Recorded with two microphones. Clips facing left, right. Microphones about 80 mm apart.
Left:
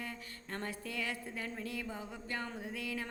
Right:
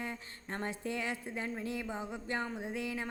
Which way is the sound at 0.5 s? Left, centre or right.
Right.